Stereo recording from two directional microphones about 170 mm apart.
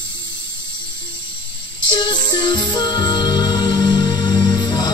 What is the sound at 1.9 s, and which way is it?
Music, 25° left (ahead or behind).